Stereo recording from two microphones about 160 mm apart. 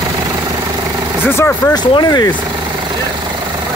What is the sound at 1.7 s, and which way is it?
Speech, 25° left (ahead or behind).